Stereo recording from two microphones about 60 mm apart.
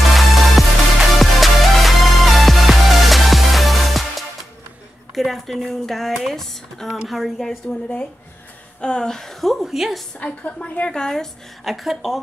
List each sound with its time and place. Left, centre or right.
0.1 s music: centre
5.1 s speech: centre
7.6 s a woman's voice: left; by 10.0 s centre
10.2 s a woman's voice: centre